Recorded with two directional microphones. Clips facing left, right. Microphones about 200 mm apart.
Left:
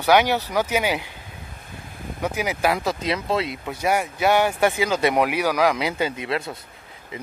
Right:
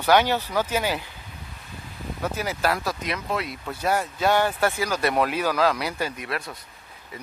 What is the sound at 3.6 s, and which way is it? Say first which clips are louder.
Speech: right 1 dB; 15° left (ahead or behind).